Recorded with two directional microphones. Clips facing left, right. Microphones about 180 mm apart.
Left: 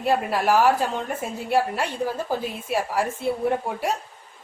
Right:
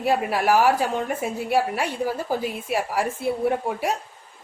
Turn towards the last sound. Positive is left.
turn(degrees=-10)  # may be behind; listen again after turning